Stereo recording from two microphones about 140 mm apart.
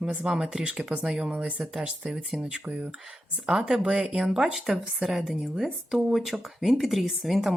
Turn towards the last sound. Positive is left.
turn(degrees=0)  # may be behind; listen again after turning